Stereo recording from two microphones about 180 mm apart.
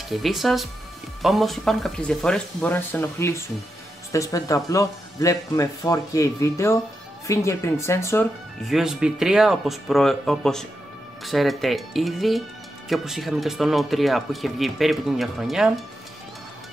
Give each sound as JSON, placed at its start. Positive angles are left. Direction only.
{"t": 0.1, "sound": "speech", "side_deg": 0}
{"t": 8.6, "sound": "speech", "side_deg": 0}